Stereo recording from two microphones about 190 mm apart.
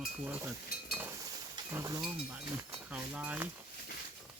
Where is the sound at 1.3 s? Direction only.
15° right (ahead or behind).